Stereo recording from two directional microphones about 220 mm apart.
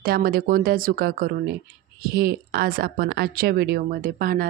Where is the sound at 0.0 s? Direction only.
40° right (ahead or behind).